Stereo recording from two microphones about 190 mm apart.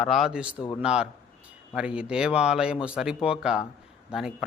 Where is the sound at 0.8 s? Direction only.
5° right (ahead or behind).